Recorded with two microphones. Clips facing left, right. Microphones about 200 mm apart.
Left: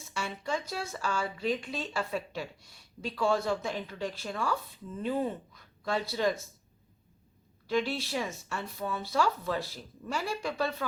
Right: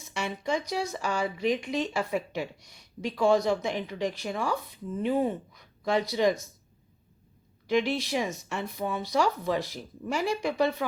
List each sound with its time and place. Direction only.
0.0 s speech: 20° right (ahead or behind)
7.7 s speech: 15° right (ahead or behind)